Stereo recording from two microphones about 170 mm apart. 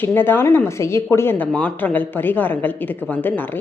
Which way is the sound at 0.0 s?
10° left (ahead or behind).